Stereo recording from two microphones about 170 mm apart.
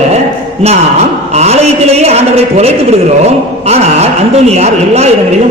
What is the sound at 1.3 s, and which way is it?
A man's voice, 40° right (ahead or behind).